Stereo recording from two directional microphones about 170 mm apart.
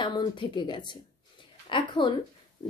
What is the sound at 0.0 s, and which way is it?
A woman's voice, 30° left (ahead or behind).